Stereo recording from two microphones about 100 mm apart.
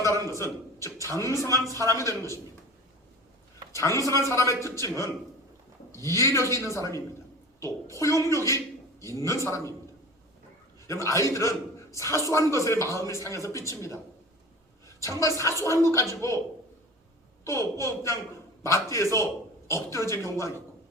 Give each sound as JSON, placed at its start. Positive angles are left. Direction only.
{"t": 0.3, "sound": "a man's voice", "side_deg": 30}
{"t": 3.8, "sound": "a man's voice", "side_deg": 30}
{"t": 10.8, "sound": "a man's voice", "side_deg": 30}
{"t": 15.4, "sound": "a man's voice", "side_deg": 30}
{"t": 17.4, "sound": "a man's voice", "side_deg": 30}